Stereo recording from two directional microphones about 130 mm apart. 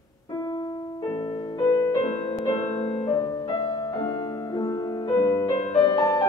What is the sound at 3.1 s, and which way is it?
Music, 25° left (ahead or behind).